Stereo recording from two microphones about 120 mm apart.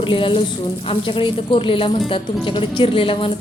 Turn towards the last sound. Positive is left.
turn(degrees=45)  # may be behind; listen again after turning